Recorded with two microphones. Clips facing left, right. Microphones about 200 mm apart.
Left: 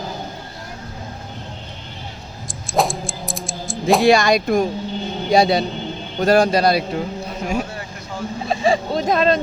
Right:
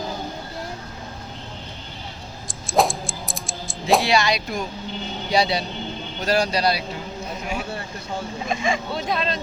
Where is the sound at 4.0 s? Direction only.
50° left (ahead or behind).